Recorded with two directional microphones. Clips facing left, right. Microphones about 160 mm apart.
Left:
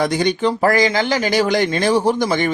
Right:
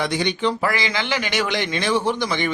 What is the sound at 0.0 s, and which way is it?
Speech, 45° left (ahead or behind).